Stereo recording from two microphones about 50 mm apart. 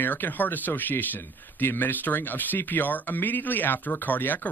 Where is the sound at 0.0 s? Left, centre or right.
Left.